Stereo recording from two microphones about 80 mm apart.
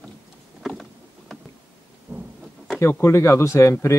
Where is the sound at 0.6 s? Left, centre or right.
Centre.